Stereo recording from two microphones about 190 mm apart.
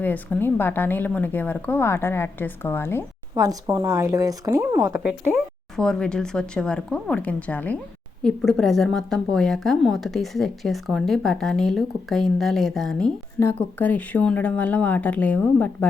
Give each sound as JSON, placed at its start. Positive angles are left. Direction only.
{"t": 0.0, "sound": "a woman's voice", "side_deg": 10}
{"t": 3.3, "sound": "speech", "side_deg": -20}
{"t": 5.7, "sound": "a woman's voice", "side_deg": 5}